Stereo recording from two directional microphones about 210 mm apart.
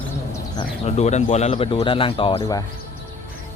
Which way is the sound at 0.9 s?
30° left (ahead or behind).